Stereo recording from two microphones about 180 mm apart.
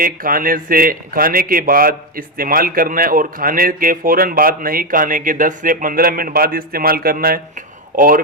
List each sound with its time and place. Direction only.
0.0 s a man's voice: 50° right (ahead or behind)